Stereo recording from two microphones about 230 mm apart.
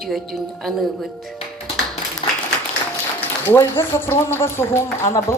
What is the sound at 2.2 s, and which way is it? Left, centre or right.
Applause, left.